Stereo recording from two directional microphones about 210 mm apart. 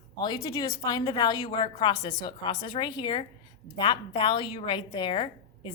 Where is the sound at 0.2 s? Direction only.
20° left (ahead or behind).